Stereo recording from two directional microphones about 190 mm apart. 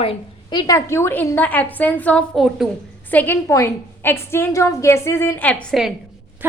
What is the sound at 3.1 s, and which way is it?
A woman's voice, 10° left (ahead or behind).